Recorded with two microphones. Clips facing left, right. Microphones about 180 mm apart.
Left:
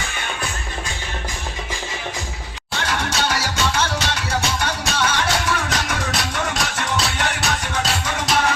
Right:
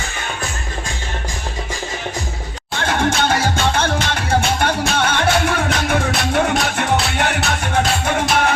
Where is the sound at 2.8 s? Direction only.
50° right (ahead or behind).